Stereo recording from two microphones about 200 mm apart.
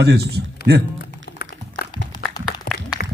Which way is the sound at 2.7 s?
45° left (ahead or behind).